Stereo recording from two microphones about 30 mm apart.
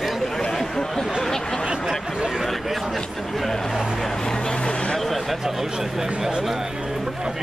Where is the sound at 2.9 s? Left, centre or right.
Centre.